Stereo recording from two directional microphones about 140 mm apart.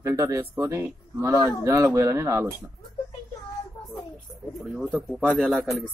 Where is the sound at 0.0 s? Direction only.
20° right (ahead or behind).